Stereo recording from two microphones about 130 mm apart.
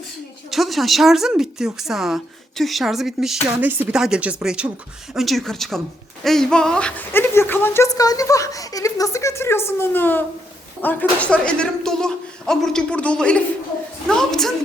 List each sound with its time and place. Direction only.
0.5 s a woman's voice: centre (ahead or behind)
3.6 s speech: 15° right (ahead or behind)
3.9 s a woman's voice: 5° right (ahead or behind)